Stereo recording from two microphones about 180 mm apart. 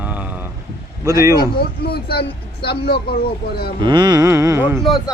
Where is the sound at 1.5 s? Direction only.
60° left (ahead or behind).